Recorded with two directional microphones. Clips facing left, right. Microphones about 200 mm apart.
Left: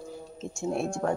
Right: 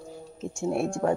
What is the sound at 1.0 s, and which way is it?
Speech, 10° right (ahead or behind).